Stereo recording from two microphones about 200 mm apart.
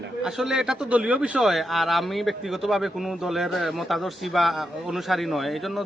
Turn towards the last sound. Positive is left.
turn(degrees=0)  # may be behind; listen again after turning